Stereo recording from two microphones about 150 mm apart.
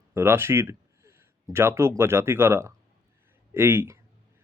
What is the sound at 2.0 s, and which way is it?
Speech, 15° right (ahead or behind).